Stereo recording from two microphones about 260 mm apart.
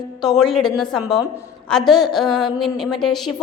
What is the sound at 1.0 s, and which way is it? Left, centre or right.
Speech, centre.